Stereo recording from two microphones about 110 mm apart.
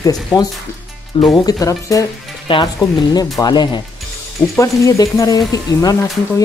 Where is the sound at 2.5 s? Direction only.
50° left (ahead or behind).